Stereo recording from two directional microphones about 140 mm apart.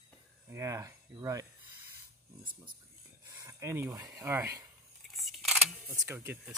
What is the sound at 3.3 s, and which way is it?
Speech, 20° right (ahead or behind).